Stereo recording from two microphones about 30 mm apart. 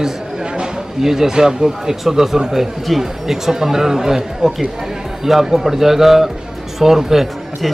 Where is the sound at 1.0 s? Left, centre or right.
Centre.